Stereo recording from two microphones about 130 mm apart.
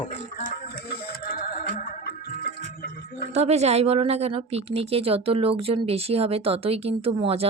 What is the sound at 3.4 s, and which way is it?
Speech, 55° right (ahead or behind).